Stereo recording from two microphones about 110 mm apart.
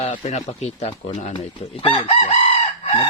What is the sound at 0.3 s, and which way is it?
A man's voice, 90° left.